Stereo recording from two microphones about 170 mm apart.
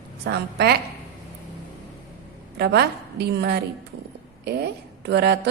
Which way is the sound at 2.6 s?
75° right (ahead or behind).